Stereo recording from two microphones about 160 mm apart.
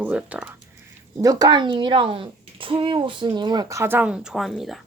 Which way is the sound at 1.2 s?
25° right (ahead or behind).